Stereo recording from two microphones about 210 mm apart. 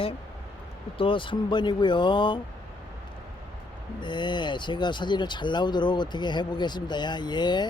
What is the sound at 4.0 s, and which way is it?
Speech, 20° left (ahead or behind).